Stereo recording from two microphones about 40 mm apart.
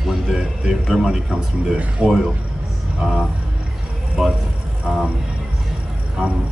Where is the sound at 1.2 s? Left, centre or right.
Right.